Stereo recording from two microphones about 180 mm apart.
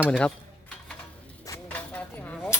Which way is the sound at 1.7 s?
10° left (ahead or behind).